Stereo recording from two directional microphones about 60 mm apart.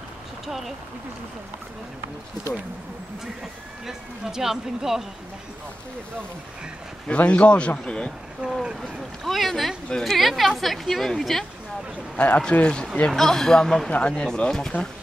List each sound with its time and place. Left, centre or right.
0.5 s a woman's voice: centre
3.8 s speech: centre
7.1 s speech: centre
8.4 s speech: centre
8.8 s a woman's voice: centre
9.8 s speech: centre
10.1 s a woman's voice: centre
12.2 s speech: centre
13.1 s speech: centre